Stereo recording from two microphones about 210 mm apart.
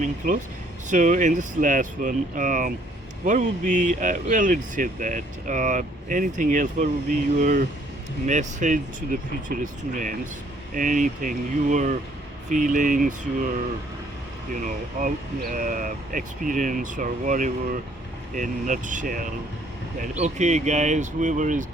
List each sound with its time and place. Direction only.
0.0 s speech: 35° right (ahead or behind)
14.5 s speech: 40° right (ahead or behind)